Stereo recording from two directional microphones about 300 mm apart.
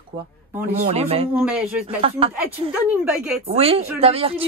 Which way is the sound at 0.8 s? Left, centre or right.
Centre.